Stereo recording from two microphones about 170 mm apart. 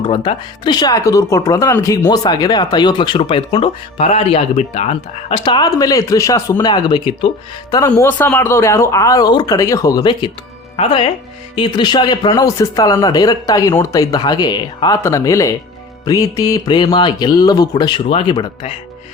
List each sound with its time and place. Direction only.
0.0 s speech: 30° left (ahead or behind)
7.9 s speech: 10° left (ahead or behind); by 18.7 s 25° left (ahead or behind)